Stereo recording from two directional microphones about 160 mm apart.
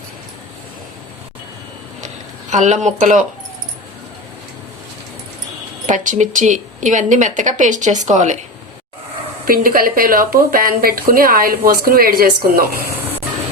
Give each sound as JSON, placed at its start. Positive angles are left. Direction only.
{"t": 2.5, "sound": "speech", "side_deg": -50}
{"t": 5.8, "sound": "speech", "side_deg": -55}
{"t": 9.5, "sound": "speech", "side_deg": -65}